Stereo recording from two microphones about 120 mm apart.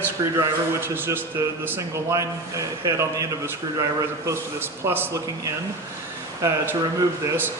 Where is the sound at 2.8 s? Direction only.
25° right (ahead or behind).